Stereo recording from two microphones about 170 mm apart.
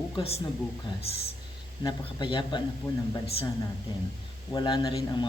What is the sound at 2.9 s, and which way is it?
Speech, 15° left (ahead or behind).